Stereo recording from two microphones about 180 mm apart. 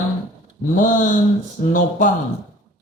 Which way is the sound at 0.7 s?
45° left (ahead or behind).